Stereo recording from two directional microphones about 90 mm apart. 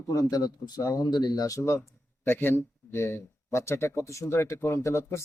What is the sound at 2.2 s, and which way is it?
Speech, 25° left (ahead or behind).